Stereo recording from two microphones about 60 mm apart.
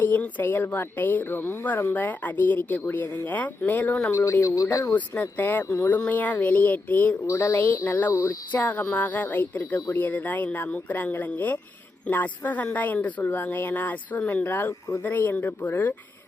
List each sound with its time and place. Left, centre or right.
0.0 s speech: left
4.1 s speech: left
4.9 s speech: left
5.6 s speech: left
6.1 s a woman's voice: left
7.3 s speech: left
7.5 s speech: left
8.1 s speech: left
8.5 s a woman's voice: left
14.4 s speech: left
14.7 s speech: left
15.0 s speech: left